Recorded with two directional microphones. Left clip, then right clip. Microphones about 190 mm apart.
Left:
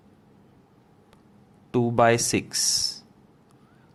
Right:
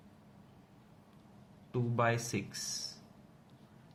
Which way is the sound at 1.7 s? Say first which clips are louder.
Left 13 dB; 55° left (ahead or behind).